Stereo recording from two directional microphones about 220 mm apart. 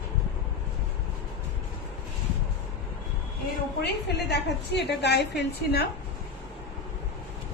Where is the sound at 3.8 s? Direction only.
50° left (ahead or behind).